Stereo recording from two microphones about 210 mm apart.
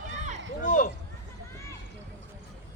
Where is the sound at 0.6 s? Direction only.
40° left (ahead or behind).